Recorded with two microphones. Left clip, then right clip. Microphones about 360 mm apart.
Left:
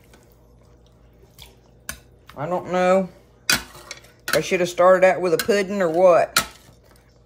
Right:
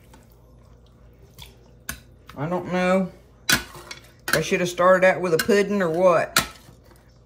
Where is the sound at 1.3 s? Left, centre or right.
Centre.